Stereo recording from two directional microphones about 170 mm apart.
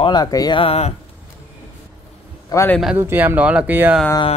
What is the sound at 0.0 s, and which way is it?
Speech, 25° left (ahead or behind).